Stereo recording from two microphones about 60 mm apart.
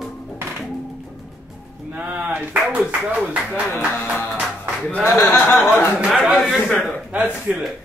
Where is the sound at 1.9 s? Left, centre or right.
Right.